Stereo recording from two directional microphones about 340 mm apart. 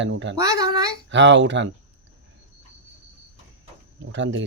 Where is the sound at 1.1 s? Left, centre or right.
Right.